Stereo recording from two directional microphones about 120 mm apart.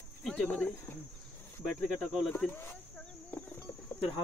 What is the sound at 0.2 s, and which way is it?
Speech, 5° left (ahead or behind).